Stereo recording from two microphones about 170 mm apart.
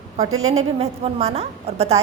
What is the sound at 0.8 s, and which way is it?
A woman's voice, 40° right (ahead or behind).